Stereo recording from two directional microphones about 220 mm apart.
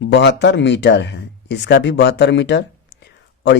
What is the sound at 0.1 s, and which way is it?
Speech, 50° left (ahead or behind).